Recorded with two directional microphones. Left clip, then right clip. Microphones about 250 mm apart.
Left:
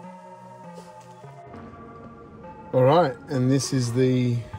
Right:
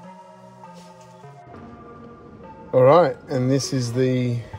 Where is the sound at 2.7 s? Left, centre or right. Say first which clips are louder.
Right 4 dB; centre.